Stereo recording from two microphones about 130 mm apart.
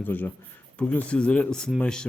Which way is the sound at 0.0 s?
15° left (ahead or behind).